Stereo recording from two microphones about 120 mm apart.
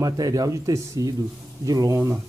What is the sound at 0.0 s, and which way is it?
Speech, 30° right (ahead or behind).